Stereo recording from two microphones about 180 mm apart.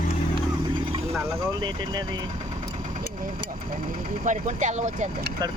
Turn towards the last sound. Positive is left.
turn(degrees=-40)  # may be behind; listen again after turning